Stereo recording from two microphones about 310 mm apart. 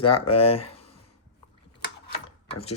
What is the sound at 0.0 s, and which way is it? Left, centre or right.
Speech, centre.